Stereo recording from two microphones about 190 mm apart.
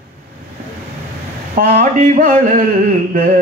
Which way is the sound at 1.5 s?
45° right (ahead or behind).